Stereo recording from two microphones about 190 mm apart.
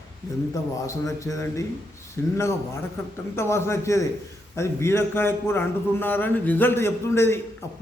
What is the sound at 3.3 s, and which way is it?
A man's voice, 15° left (ahead or behind).